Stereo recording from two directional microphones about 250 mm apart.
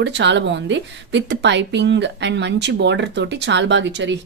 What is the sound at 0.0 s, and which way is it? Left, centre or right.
Speech, right.